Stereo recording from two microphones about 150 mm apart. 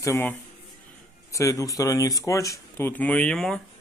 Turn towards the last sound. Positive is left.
turn(degrees=5)  # may be behind; listen again after turning